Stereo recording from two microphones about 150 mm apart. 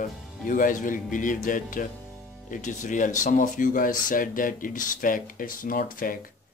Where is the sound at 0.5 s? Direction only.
60° left (ahead or behind).